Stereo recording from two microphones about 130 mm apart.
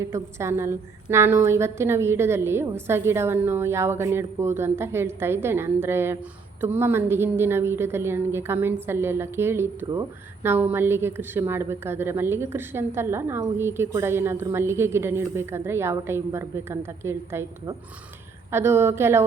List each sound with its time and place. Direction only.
0.0 s a woman's voice: 20° right (ahead or behind)